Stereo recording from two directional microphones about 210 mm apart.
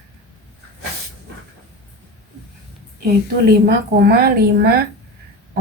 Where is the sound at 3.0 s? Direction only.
45° right (ahead or behind).